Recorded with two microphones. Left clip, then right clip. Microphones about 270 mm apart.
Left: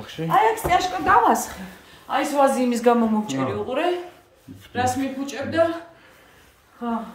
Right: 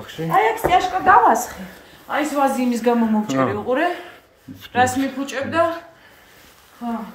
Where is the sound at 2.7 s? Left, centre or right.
Centre.